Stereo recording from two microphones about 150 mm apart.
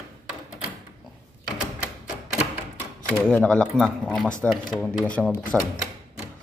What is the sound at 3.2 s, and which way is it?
Speech, 10° left (ahead or behind).